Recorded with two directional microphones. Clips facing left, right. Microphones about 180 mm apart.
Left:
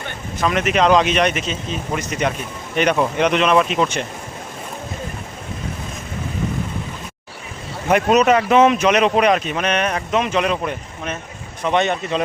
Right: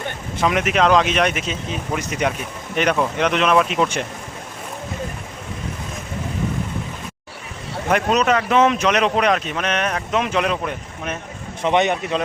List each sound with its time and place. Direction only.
0.4 s a man's voice: 10° right (ahead or behind)
2.7 s speech: 5° left (ahead or behind)
7.9 s speech: 5° left (ahead or behind)
11.6 s a man's voice: 15° right (ahead or behind)